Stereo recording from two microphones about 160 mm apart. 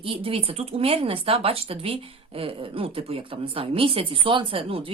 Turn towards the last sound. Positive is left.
turn(degrees=-35)  # may be behind; listen again after turning